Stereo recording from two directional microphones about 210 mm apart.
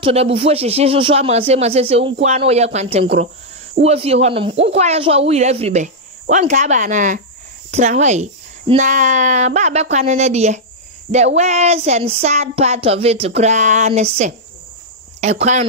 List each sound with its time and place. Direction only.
0.0 s speech: 30° right (ahead or behind)